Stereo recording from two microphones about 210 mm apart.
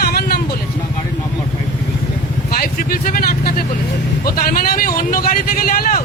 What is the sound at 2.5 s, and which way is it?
Speech, 45° left (ahead or behind).